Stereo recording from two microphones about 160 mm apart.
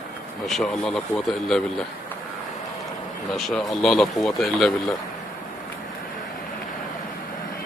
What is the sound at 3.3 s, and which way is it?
Speech, centre (ahead or behind).